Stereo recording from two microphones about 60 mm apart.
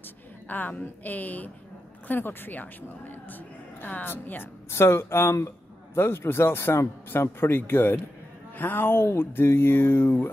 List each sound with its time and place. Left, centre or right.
0.5 s a woman's voice: left